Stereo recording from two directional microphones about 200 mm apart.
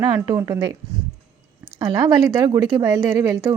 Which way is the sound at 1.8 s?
20° right (ahead or behind).